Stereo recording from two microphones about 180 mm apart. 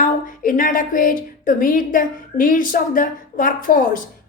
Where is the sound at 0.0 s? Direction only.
50° left (ahead or behind).